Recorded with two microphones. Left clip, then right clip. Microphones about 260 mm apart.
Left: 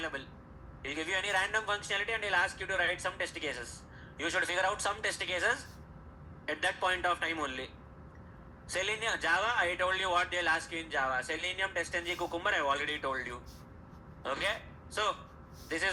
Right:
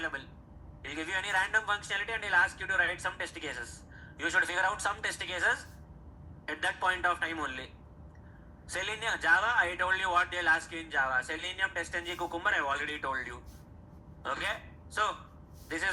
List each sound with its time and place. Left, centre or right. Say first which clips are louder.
0.0 s a man's voice: right 2 dB; centre
8.7 s a man's voice: even; centre